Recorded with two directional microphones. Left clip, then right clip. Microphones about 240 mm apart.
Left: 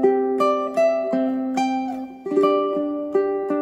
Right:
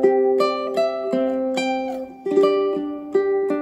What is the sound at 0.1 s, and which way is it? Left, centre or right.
Music, centre.